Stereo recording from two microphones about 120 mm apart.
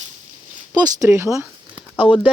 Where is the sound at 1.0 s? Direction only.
20° right (ahead or behind).